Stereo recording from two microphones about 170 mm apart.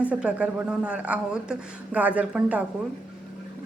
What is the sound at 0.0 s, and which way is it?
A woman's voice, 5° right (ahead or behind).